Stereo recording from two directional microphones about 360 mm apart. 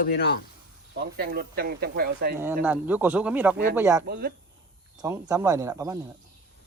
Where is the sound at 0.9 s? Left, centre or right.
Right.